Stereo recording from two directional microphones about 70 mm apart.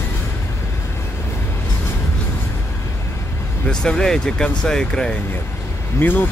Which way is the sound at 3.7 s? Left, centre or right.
Centre.